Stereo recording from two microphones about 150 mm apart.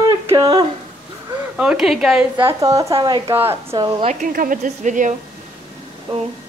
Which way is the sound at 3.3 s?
15° right (ahead or behind).